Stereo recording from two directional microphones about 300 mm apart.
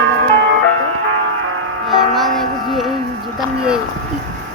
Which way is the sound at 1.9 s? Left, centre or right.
Centre.